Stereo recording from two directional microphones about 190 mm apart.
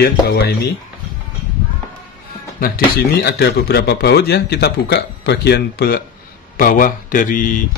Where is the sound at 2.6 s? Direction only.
55° left (ahead or behind).